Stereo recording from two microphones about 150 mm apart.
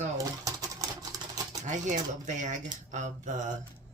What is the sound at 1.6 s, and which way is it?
Speech, 55° right (ahead or behind).